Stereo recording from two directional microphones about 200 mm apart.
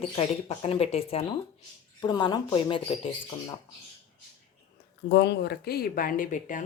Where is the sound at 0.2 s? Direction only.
30° left (ahead or behind).